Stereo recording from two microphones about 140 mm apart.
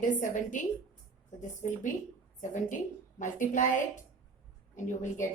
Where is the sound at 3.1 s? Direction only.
65° left (ahead or behind).